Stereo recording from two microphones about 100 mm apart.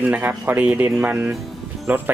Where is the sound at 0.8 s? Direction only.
25° right (ahead or behind).